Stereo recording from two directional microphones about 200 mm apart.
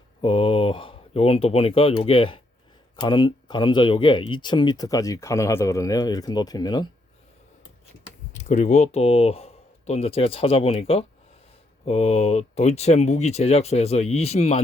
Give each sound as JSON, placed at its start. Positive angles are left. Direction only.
{"t": 0.2, "sound": "speech", "side_deg": 25}
{"t": 8.3, "sound": "speech", "side_deg": 35}